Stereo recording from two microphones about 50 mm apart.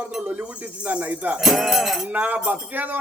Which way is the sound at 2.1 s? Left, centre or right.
Right.